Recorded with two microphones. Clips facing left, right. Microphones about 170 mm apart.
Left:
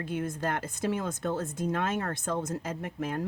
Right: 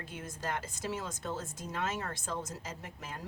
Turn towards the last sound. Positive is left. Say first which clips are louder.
# left 12 dB
turn(degrees=55)  # may be behind; listen again after turning